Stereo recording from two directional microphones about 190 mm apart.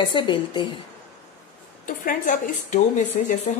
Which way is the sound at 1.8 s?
45° left (ahead or behind).